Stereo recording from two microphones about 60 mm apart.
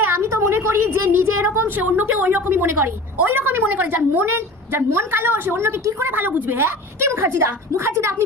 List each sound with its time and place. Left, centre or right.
0.1 s a woman's voice: right
5.5 s a woman's voice: right
6.1 s a woman's voice: right